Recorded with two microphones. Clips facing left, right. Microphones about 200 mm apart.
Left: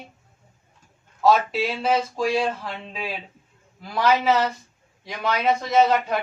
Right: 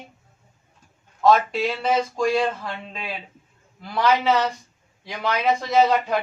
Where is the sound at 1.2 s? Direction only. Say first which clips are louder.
Right 1 dB; 5° left (ahead or behind).